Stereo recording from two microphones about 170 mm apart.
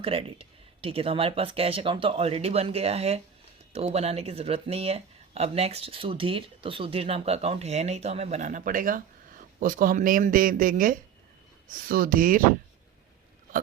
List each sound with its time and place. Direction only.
0.0 s speech: 35° right (ahead or behind); by 12.4 s 55° right (ahead or behind)